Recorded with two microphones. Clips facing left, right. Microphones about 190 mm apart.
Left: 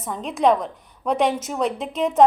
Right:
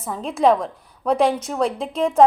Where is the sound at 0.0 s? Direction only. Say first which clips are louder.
Right 2 dB; centre (ahead or behind).